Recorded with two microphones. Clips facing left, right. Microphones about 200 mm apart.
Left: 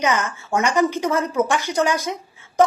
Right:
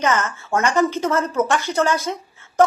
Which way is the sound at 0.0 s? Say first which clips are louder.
Right 1 dB; 15° left (ahead or behind).